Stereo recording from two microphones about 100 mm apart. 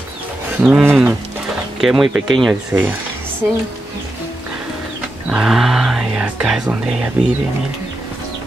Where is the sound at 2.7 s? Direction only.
20° right (ahead or behind).